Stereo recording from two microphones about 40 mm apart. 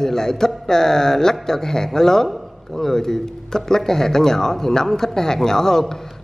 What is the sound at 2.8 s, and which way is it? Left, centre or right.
Speech, centre.